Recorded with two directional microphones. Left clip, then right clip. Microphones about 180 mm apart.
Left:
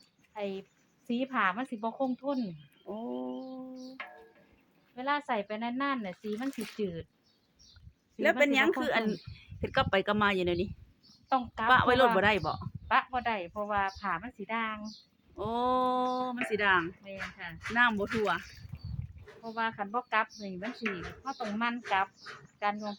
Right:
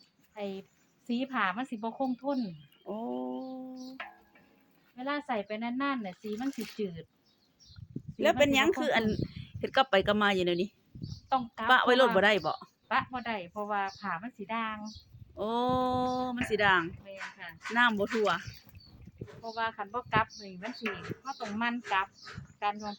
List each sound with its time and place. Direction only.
0.3 s a woman's voice: 15° left (ahead or behind)
1.0 s a woman's voice: 5° left (ahead or behind)
2.8 s roaring cats: 15° right (ahead or behind)
4.9 s speech: 20° left (ahead or behind)
6.3 s a woman's voice: centre (ahead or behind)
6.7 s speech: 10° left (ahead or behind)
8.2 s speech: 15° right (ahead or behind)
11.3 s speech: 15° left (ahead or behind)
11.7 s speech: 10° right (ahead or behind)
12.9 s a woman's voice: 20° left (ahead or behind)
15.4 s speech: 10° right (ahead or behind)
17.0 s a woman's voice: 25° left (ahead or behind)
17.7 s speech: 10° right (ahead or behind)
19.5 s a woman's voice: 15° left (ahead or behind)